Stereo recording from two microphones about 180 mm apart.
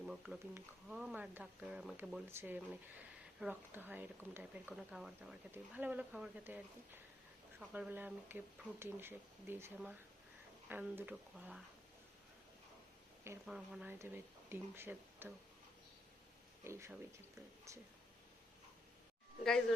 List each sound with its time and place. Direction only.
0.0 s speech: 5° right (ahead or behind)
2.2 s speech: 15° right (ahead or behind)
13.4 s speech: 5° right (ahead or behind)
16.6 s speech: 15° right (ahead or behind)